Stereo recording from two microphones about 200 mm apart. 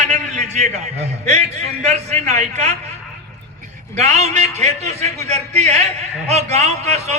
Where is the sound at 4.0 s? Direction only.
35° right (ahead or behind).